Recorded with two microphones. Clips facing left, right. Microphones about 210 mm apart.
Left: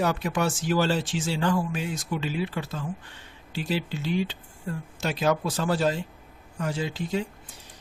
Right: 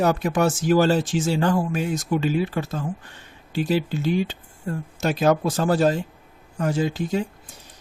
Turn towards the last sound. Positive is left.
turn(degrees=-45)  # may be behind; listen again after turning